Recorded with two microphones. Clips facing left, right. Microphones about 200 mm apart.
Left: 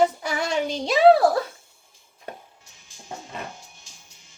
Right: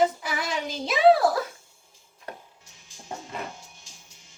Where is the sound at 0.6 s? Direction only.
30° left (ahead or behind).